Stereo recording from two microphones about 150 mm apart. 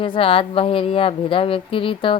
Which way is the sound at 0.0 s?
35° left (ahead or behind).